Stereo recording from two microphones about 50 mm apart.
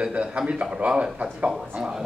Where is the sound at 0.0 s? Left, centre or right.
Right.